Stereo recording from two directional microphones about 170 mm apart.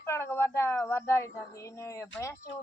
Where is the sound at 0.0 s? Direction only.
15° left (ahead or behind).